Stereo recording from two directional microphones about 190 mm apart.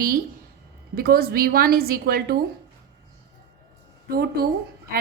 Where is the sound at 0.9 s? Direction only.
55° right (ahead or behind).